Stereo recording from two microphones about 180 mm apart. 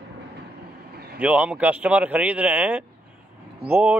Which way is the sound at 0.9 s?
60° right (ahead or behind).